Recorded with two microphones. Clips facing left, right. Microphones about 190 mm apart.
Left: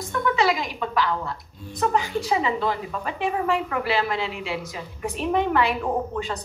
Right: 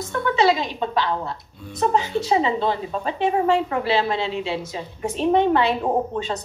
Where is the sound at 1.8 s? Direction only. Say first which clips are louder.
Right 3 dB; 25° right (ahead or behind).